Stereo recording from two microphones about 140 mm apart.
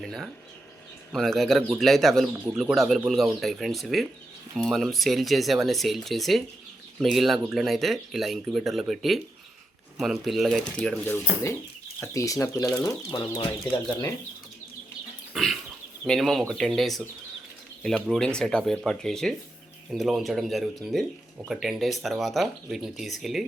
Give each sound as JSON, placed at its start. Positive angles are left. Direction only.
{"t": 0.0, "sound": "speech", "side_deg": 0}
{"t": 11.0, "sound": "speech", "side_deg": 15}
{"t": 13.1, "sound": "speech", "side_deg": 35}
{"t": 15.3, "sound": "pig", "side_deg": 0}
{"t": 16.0, "sound": "speech", "side_deg": 0}